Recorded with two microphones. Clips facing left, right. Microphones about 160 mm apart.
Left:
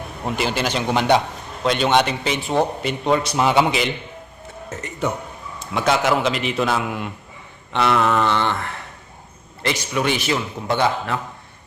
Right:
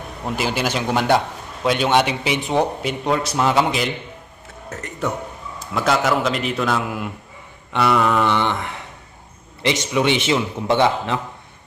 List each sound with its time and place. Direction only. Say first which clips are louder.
0.3 s a man's voice: even; 5° right (ahead or behind)
3.1 s speech: left 1 dB; centre (ahead or behind)
7.7 s a sound: right 1 dB; 5° right (ahead or behind)
9.6 s a man's voice: right 3 dB; 20° right (ahead or behind)